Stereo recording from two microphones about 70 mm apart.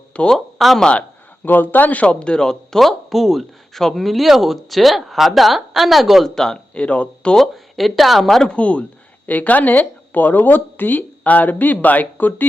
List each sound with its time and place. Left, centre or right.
0.1 s speech: centre
0.3 s speech: centre
1.5 s speech: left
7.3 s speech: centre
8.5 s speech: centre